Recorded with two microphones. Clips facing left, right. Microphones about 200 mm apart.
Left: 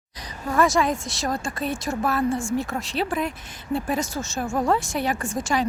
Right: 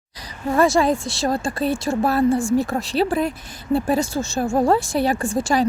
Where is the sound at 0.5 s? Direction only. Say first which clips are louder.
Right 4 dB; 30° right (ahead or behind).